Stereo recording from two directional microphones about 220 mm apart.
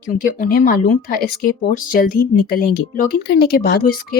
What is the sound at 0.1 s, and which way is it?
Speech, 40° left (ahead or behind).